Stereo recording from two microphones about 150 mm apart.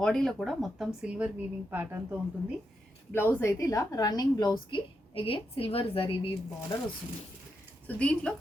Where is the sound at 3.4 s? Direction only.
20° left (ahead or behind); by 6.3 s 40° left (ahead or behind).